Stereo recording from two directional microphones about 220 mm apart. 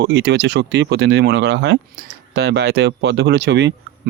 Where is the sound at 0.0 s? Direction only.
50° right (ahead or behind).